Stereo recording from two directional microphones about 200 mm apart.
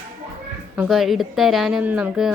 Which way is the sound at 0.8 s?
Centre (ahead or behind).